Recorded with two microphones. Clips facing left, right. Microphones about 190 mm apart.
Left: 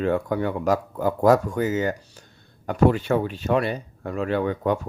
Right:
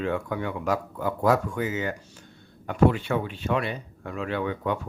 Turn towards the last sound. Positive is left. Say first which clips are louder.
# left 5 dB
turn(degrees=40)  # may be behind; listen again after turning